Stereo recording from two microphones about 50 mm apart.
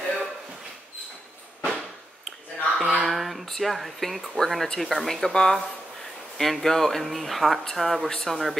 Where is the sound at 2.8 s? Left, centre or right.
Centre.